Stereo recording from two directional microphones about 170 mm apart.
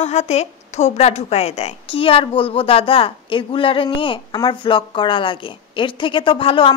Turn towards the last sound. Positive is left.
turn(degrees=30)  # may be behind; listen again after turning